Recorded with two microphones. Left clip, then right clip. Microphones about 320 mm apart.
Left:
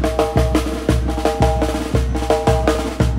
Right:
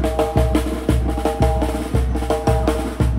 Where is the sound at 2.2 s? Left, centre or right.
Centre.